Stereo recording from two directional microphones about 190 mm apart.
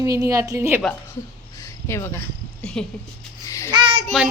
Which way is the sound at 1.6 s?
15° left (ahead or behind).